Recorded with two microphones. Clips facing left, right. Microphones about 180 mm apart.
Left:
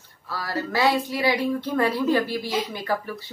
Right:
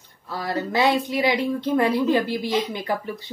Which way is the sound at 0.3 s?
20° right (ahead or behind).